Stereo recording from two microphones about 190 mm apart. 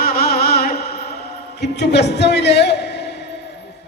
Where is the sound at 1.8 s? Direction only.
60° left (ahead or behind).